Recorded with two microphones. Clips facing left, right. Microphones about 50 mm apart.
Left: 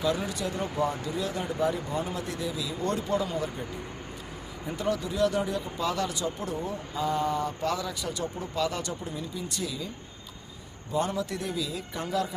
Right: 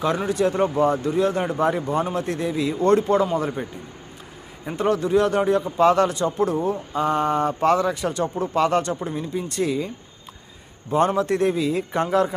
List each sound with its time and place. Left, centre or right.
0.2 s speech: right
10.9 s speech: right